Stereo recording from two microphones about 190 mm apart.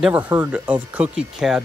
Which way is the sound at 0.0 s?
10° right (ahead or behind).